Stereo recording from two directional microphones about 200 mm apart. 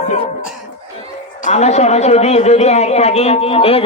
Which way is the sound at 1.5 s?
35° left (ahead or behind).